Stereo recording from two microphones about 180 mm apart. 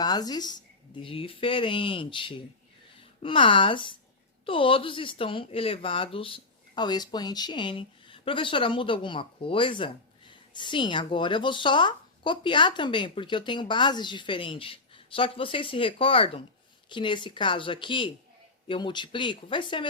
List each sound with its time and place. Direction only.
0.0 s speech: 20° left (ahead or behind)